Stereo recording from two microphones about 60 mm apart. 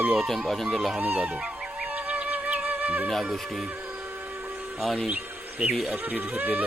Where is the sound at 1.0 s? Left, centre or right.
Right.